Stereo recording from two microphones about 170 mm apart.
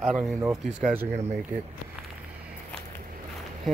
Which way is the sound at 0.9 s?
15° right (ahead or behind).